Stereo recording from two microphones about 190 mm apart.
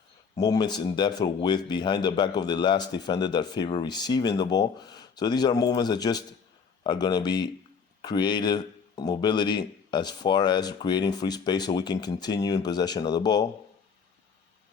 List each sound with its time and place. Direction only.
0.3 s speech: 20° left (ahead or behind)